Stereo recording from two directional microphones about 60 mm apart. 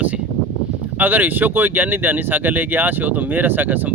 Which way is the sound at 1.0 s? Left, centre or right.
Right.